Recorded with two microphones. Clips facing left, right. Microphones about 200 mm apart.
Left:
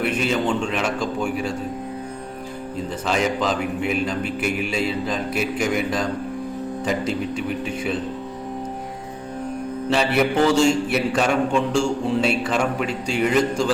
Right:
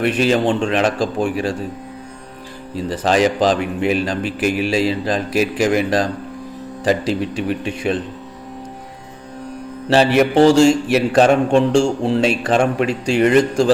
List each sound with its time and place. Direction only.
0.0 s a man's voice: 90° right
2.7 s a man's voice: 90° right
7.1 s a man's voice: 90° right
9.9 s a man's voice: 85° right
12.8 s a man's voice: 90° right